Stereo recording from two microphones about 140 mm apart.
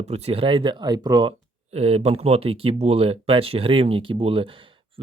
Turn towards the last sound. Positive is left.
turn(degrees=-40)  # may be behind; listen again after turning